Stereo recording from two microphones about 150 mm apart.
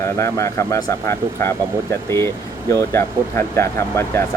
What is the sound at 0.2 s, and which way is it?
Speech, 20° left (ahead or behind).